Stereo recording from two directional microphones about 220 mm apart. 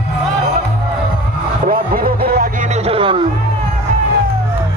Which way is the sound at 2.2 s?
45° right (ahead or behind).